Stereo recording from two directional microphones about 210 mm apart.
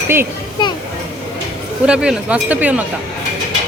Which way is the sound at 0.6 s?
20° left (ahead or behind).